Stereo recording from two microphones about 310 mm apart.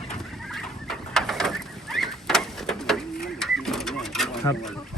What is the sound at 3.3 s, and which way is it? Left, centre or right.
Bird, centre.